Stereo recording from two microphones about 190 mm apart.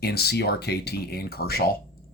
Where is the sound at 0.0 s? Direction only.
55° left (ahead or behind).